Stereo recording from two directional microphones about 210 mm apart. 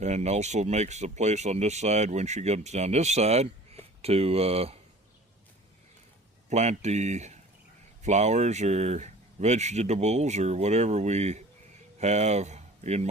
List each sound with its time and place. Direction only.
0.0 s speech: 30° right (ahead or behind)
6.5 s speech: 30° right (ahead or behind)